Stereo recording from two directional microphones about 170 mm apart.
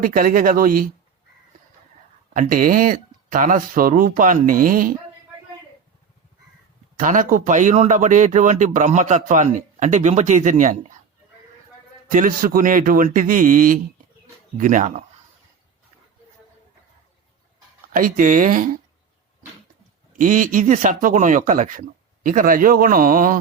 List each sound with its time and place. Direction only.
0.0 s speech: 55° right (ahead or behind)
2.3 s speech: 50° right (ahead or behind)
7.0 s speech: 50° right (ahead or behind)
12.1 s speech: 55° right (ahead or behind)
17.9 s speech: 50° right (ahead or behind)
20.1 s speech: 50° right (ahead or behind)